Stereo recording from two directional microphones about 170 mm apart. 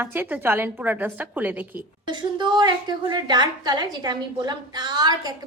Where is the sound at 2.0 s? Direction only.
25° right (ahead or behind).